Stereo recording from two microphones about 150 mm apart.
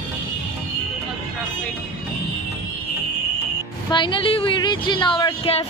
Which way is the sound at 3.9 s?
30° left (ahead or behind).